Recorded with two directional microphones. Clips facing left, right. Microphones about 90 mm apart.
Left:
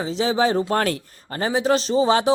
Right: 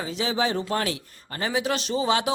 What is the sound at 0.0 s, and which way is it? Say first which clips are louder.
A man's voice: left 6 dB; 35° left (ahead or behind).